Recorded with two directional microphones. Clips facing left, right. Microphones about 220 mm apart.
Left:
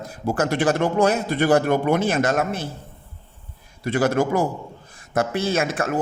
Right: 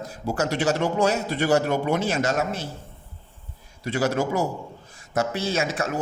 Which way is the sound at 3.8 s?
55° left (ahead or behind).